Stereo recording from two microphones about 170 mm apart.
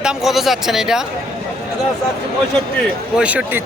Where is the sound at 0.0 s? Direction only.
5° right (ahead or behind).